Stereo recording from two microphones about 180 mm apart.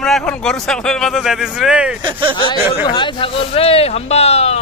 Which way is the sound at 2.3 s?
25° left (ahead or behind).